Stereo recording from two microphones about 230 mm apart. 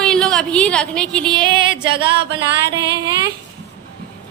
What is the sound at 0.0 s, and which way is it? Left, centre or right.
A woman's voice, centre.